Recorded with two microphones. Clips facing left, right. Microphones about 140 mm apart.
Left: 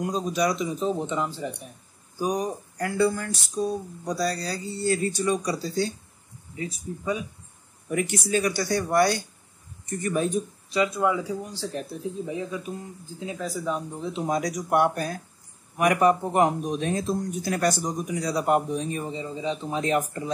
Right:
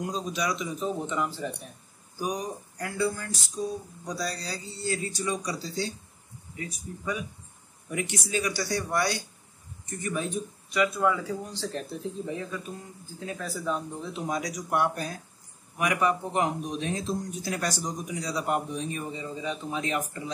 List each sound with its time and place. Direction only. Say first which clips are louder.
0.1 s speech: left 5 dB; 45° left (ahead or behind)
0.7 s speech: left 3 dB; 20° left (ahead or behind)
2.8 s speech: left 6 dB; 65° left (ahead or behind)
6.5 s speech: left 5 dB; 25° left (ahead or behind)
7.9 s speech: left 5 dB; 50° left (ahead or behind)
10.7 s speech: left 2 dB; 25° left (ahead or behind)
14.2 s speech: left 5 dB; 40° left (ahead or behind)
14.7 s speech: left 5 dB; 55° left (ahead or behind)
15.8 s speech: left 6 dB; 45° left (ahead or behind)